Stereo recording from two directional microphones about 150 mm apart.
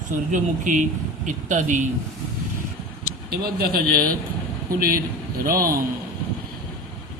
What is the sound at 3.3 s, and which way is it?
Speech, 90° right.